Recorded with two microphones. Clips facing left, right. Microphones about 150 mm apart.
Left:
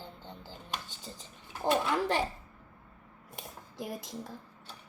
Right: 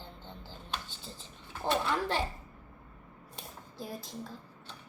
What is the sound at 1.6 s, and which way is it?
Speech, 10° left (ahead or behind).